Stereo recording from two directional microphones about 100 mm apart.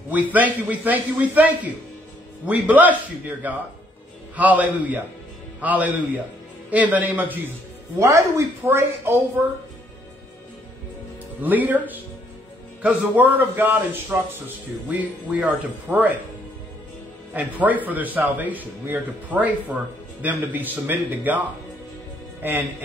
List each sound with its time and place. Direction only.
0.3 s a man's voice: 15° right (ahead or behind)
8.0 s a woman's voice: 30° right (ahead or behind)
11.4 s a man's voice: 15° right (ahead or behind)
17.3 s a man's voice: 15° right (ahead or behind)